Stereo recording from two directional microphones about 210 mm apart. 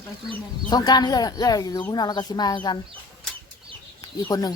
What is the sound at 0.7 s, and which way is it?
Speech, 20° left (ahead or behind).